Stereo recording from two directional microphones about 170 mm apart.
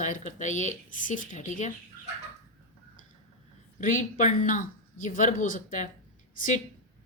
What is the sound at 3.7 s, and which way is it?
A woman's voice, 50° left (ahead or behind).